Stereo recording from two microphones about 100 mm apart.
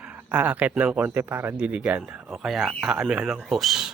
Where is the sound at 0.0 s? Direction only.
10° right (ahead or behind).